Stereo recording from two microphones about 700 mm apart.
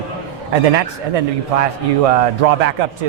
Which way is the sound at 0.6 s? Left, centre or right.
Right.